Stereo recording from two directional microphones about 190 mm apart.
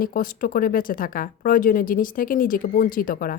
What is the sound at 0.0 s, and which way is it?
Speech, 45° left (ahead or behind).